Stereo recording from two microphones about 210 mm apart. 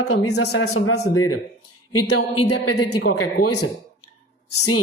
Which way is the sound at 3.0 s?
90° left.